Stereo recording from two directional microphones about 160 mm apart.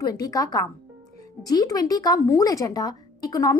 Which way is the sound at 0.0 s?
20° left (ahead or behind).